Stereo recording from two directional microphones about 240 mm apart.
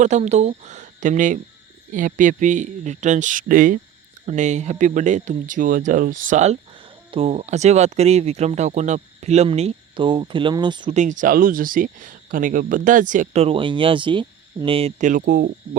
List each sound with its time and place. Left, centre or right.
0.0 s speech: right
10.9 s speech: right